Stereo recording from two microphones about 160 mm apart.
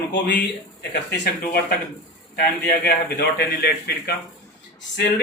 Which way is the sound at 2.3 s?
75° left (ahead or behind).